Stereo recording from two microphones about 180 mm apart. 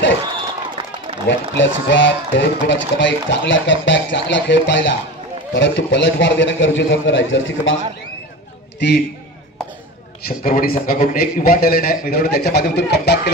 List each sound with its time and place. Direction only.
1.2 s speech: 85° left
8.7 s a man's voice: 70° left (ahead or behind)
10.2 s a man's voice: 55° left (ahead or behind)